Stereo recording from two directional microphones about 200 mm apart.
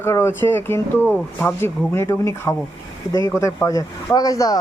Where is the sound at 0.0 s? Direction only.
10° left (ahead or behind).